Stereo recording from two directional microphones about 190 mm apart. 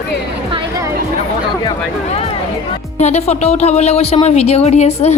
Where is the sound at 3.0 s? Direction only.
35° left (ahead or behind).